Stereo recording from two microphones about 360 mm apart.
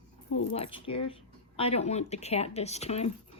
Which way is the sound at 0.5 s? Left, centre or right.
Centre.